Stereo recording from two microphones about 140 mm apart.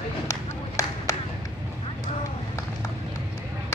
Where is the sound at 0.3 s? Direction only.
25° left (ahead or behind).